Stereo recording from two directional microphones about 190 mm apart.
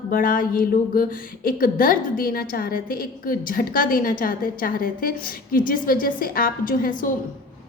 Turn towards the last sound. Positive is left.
turn(degrees=45)  # may be behind; listen again after turning